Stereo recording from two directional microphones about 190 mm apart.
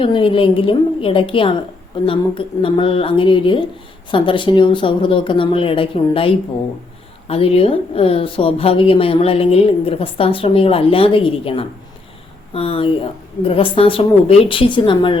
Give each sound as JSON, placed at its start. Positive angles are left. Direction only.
{"t": 0.0, "sound": "a woman's voice", "side_deg": 25}